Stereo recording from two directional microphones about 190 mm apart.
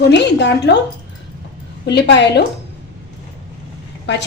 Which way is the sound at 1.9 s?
65° left (ahead or behind).